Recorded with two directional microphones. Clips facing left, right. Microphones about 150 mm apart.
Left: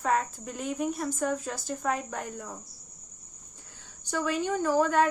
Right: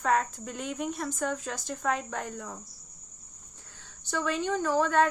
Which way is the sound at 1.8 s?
10° left (ahead or behind).